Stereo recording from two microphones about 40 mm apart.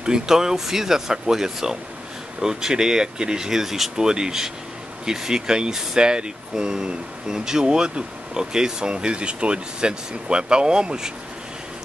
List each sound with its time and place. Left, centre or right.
0.0 s speech: centre